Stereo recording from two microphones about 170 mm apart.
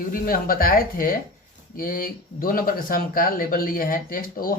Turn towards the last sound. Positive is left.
turn(degrees=55)  # may be behind; listen again after turning